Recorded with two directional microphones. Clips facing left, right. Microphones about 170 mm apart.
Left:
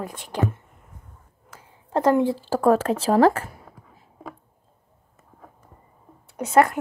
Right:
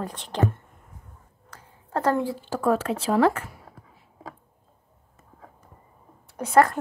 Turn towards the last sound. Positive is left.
turn(degrees=20)  # may be behind; listen again after turning